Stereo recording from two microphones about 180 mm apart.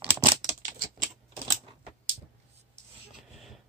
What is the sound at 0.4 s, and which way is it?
Scissors, 45° right (ahead or behind).